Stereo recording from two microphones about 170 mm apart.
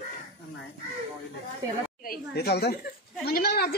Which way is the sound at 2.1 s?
70° left (ahead or behind).